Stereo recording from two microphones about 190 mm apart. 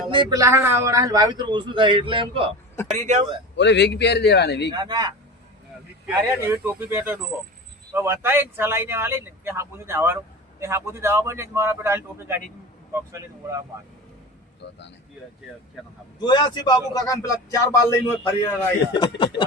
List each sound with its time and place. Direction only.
0.1 s a man's voice: 25° right (ahead or behind)
3.5 s a man's voice: 65° left (ahead or behind)
4.7 s a man's voice: 20° right (ahead or behind)
6.2 s speech: 15° right (ahead or behind)
14.6 s speech: 65° left (ahead or behind)
16.2 s speech: 25° left (ahead or behind)